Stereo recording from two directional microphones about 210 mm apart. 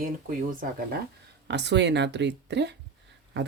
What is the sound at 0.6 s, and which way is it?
Speech, 40° right (ahead or behind).